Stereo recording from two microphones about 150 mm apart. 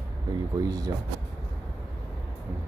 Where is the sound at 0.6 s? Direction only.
25° right (ahead or behind).